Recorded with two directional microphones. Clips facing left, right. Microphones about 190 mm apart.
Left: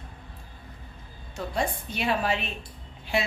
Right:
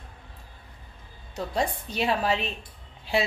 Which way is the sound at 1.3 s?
35° right (ahead or behind).